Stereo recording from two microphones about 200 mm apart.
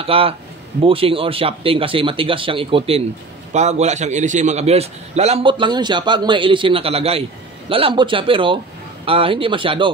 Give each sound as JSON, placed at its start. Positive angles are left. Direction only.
{"t": 0.0, "sound": "a man's voice", "side_deg": -30}